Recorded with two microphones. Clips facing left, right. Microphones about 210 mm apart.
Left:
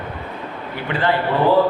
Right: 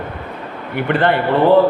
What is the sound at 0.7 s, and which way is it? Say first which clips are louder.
Speech: right 5 dB; 60° right (ahead or behind).